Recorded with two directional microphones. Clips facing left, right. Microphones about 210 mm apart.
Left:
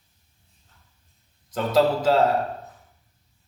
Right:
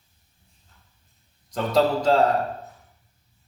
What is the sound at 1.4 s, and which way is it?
Speech, 5° left (ahead or behind).